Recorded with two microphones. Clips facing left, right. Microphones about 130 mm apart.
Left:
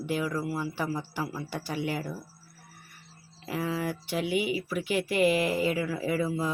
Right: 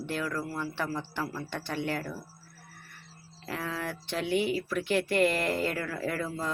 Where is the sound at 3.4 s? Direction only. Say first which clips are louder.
Left 4 dB; 10° left (ahead or behind).